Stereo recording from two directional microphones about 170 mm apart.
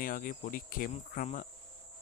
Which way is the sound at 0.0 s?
55° left (ahead or behind).